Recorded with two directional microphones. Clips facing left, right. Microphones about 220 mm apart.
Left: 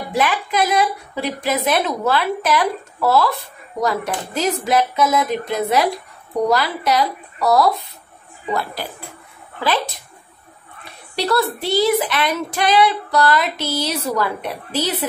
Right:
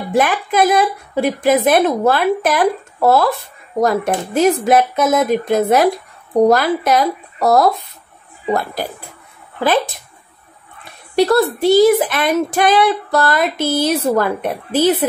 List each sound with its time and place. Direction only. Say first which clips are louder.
0.1 s speech: right 4 dB; 50° right (ahead or behind)
11.1 s speech: right 7 dB; 45° right (ahead or behind)